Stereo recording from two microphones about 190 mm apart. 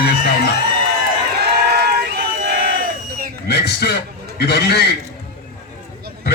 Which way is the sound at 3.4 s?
60° left (ahead or behind).